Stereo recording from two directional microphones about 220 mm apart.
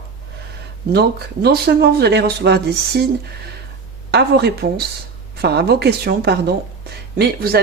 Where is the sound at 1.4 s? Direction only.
45° right (ahead or behind).